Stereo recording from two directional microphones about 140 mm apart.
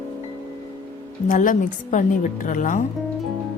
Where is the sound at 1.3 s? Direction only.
70° left (ahead or behind).